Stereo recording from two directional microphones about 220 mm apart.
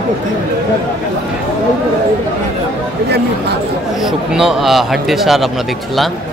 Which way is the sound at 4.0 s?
Centre (ahead or behind).